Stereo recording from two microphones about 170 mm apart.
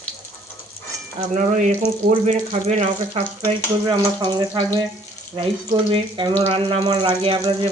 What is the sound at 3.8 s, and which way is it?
Speech, 25° right (ahead or behind).